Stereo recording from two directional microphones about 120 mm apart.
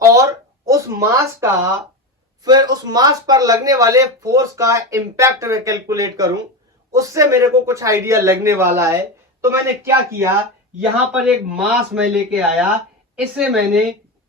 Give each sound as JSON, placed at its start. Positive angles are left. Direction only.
{"t": 0.0, "sound": "a sound", "side_deg": -25}
{"t": 2.4, "sound": "speech", "side_deg": -35}
{"t": 10.8, "sound": "a man's voice", "side_deg": -10}